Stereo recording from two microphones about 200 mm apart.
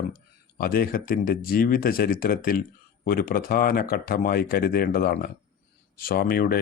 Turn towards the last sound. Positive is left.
turn(degrees=50)  # may be behind; listen again after turning